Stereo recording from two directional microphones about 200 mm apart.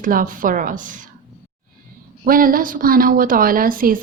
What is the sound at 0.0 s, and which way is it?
A woman's voice, 45° right (ahead or behind).